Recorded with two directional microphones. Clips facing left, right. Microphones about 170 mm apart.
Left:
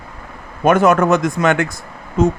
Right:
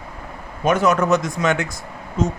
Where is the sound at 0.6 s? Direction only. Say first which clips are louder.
Left 5 dB; 55° left (ahead or behind).